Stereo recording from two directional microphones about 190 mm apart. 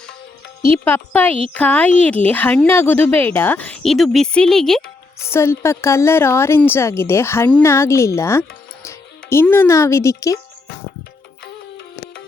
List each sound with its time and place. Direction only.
0.6 s a woman's voice: 10° left (ahead or behind)
5.2 s a woman's voice: 15° left (ahead or behind)